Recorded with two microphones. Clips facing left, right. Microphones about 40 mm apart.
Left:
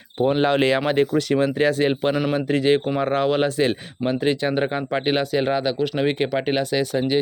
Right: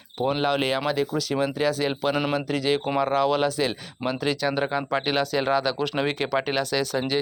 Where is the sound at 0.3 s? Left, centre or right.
Left.